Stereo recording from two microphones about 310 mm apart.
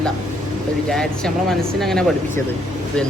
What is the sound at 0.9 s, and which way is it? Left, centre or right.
Speech, centre.